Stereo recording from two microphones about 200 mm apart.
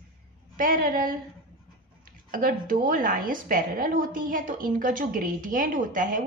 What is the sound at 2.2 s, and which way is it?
A woman's voice, 45° right (ahead or behind).